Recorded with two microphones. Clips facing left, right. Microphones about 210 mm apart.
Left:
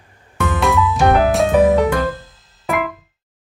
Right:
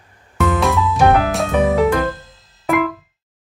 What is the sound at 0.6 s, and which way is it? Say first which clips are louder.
Music: left 1 dB; centre (ahead or behind).